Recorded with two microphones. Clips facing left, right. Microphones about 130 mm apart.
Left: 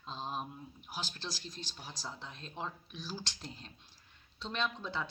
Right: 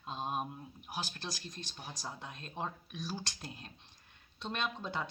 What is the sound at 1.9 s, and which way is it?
Speech, 15° right (ahead or behind).